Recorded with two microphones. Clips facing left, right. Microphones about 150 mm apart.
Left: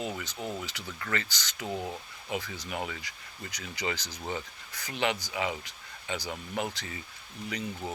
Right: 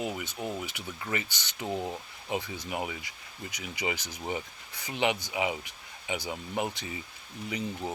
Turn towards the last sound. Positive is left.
turn(degrees=-20)  # may be behind; listen again after turning